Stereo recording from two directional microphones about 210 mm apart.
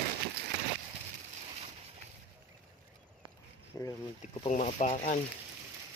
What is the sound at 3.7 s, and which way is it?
Speech, 10° left (ahead or behind).